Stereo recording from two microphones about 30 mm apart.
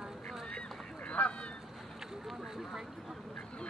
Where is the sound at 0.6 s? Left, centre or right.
Left.